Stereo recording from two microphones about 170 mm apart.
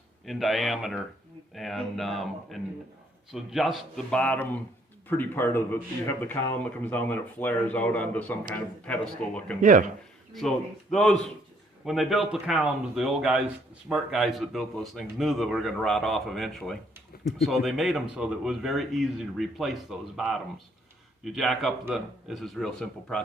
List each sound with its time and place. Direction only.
0.3 s a man's voice: centre (ahead or behind)
9.6 s speech: 50° right (ahead or behind)
10.9 s speech: centre (ahead or behind)